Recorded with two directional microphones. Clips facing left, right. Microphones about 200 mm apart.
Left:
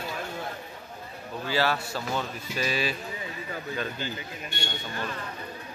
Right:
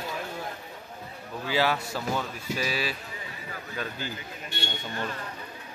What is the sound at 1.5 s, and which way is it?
Speech, 15° right (ahead or behind).